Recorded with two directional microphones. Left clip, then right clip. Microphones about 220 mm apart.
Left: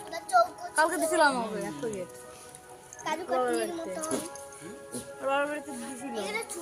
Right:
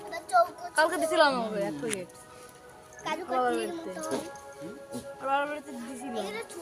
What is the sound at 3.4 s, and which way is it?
Speech, 30° right (ahead or behind).